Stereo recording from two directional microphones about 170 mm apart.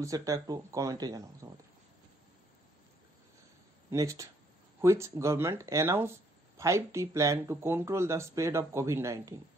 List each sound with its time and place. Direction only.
0.0 s speech: 20° right (ahead or behind)
3.9 s speech: 20° right (ahead or behind)